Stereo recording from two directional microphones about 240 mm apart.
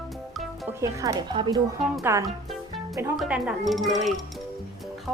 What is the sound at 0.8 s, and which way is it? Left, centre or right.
Speech, centre.